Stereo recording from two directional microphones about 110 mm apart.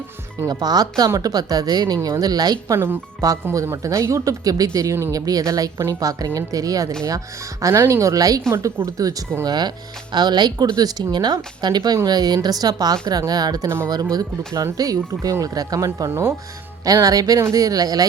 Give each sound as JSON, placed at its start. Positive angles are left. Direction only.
{"t": 0.4, "sound": "speech", "side_deg": -35}
{"t": 2.7, "sound": "speech", "side_deg": -25}
{"t": 13.7, "sound": "speech", "side_deg": -20}
{"t": 13.9, "sound": "speech", "side_deg": -35}